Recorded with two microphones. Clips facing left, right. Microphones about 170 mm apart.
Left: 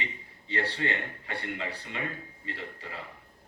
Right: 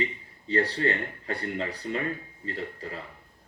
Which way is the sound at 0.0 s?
40° right (ahead or behind).